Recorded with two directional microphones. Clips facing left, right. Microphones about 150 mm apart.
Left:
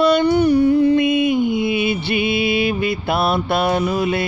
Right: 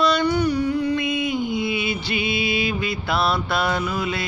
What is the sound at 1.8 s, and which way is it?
Music, 55° left (ahead or behind).